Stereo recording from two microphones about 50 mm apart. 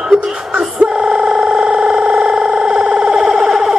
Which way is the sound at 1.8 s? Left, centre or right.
Centre.